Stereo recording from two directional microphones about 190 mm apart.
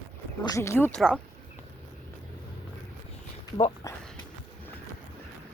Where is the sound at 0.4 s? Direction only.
15° left (ahead or behind).